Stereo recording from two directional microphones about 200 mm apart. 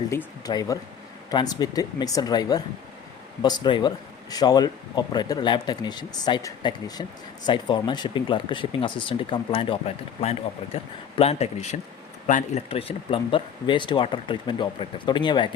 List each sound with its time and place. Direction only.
0.4 s speech: 20° left (ahead or behind)